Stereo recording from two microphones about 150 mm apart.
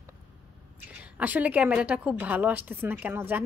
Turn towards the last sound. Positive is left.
turn(degrees=-10)  # may be behind; listen again after turning